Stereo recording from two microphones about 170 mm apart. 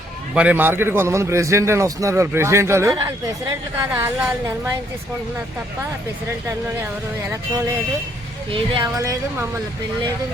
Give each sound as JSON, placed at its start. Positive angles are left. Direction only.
{"t": 0.3, "sound": "a man's voice", "side_deg": -10}
{"t": 8.5, "sound": "a woman's voice", "side_deg": -30}
{"t": 9.0, "sound": "a man's voice", "side_deg": -15}